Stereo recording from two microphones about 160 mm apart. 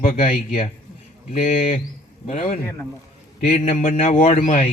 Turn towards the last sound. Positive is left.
turn(degrees=55)  # may be behind; listen again after turning